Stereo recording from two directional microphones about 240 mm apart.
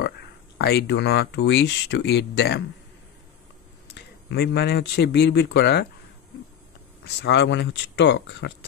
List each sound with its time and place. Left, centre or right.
0.6 s speech: left
3.9 s speech: left
7.2 s speech: left